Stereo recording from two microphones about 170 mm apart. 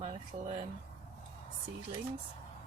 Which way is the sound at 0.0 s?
30° right (ahead or behind).